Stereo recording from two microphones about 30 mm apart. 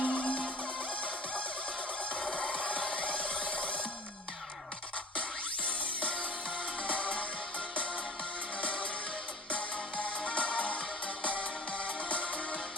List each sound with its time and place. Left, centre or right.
0.0 s music: left
2.1 s music: left
6.8 s music: left
9.5 s music: left
12.0 s music: left